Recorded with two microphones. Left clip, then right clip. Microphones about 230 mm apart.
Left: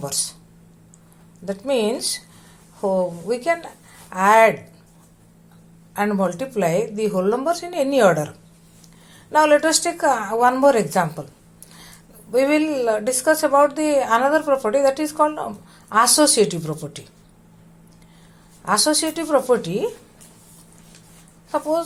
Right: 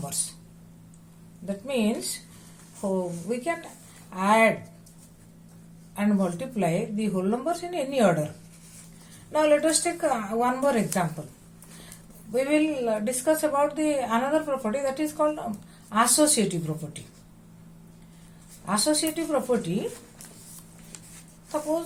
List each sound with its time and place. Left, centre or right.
1.5 s a woman's voice: left
3.2 s a woman's voice: left
5.9 s a woman's voice: left
9.3 s a woman's voice: left
12.3 s a woman's voice: left
18.6 s a woman's voice: left